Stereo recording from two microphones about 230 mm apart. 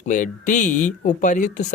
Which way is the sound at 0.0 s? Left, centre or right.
Left.